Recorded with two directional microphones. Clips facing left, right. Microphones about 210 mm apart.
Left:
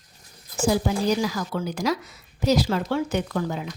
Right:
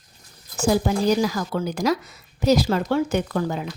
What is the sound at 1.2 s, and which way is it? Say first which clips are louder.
A woman's voice: right 3 dB; 45° right (ahead or behind).